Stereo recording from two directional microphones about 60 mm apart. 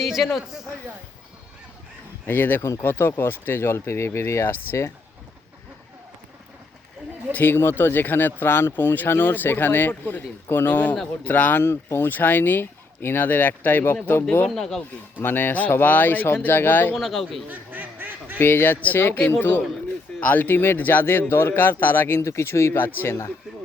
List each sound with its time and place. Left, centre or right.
0.0 s a sound: centre
2.2 s speech: left
2.6 s speech: left
2.8 s speech: left
7.3 s speech: left
11.6 s speech: left
14.5 s speech: centre
15.2 s speech: left
16.9 s speech: centre
17.5 s quack: right
18.3 s speech: left